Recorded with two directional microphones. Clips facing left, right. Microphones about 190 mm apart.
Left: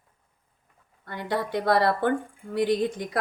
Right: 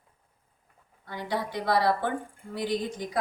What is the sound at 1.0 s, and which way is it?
A woman's voice, 60° left (ahead or behind).